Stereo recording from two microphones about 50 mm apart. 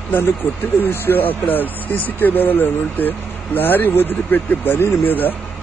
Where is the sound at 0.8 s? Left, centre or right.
Left.